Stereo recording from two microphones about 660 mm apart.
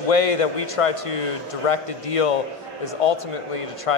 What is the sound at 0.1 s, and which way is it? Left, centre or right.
A man's voice, left.